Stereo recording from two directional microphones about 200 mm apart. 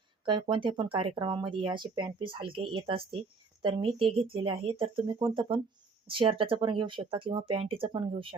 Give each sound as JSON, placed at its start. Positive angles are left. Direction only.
{"t": 0.3, "sound": "speech", "side_deg": -25}